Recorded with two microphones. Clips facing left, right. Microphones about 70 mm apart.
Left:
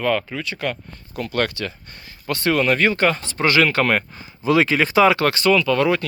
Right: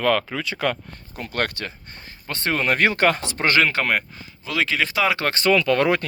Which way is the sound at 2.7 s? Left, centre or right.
Right.